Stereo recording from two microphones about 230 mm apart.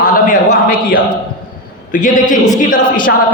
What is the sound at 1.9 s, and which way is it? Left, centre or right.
Speech, left.